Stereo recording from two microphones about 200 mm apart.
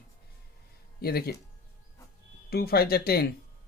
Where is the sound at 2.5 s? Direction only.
50° left (ahead or behind).